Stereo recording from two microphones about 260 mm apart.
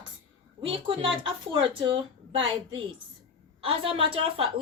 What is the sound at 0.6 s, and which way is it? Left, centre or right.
A woman's voice, centre.